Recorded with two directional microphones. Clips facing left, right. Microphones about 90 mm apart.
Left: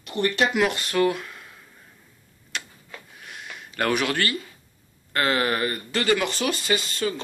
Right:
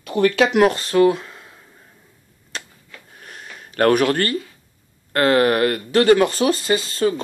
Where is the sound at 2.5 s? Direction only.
35° right (ahead or behind).